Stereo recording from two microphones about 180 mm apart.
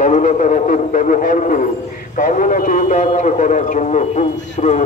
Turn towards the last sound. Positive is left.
turn(degrees=40)  # may be behind; listen again after turning